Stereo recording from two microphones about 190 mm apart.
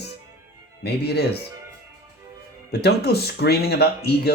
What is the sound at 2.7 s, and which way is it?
Speech, 60° left (ahead or behind).